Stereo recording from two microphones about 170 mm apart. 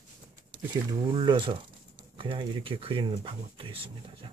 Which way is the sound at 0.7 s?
20° right (ahead or behind).